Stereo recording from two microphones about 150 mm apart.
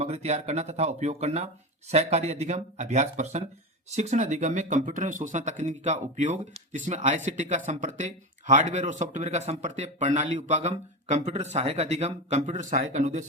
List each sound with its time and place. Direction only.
0.0 s speech: 45° right (ahead or behind)